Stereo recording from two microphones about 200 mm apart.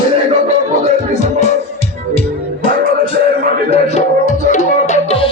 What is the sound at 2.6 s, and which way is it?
Music, 25° left (ahead or behind).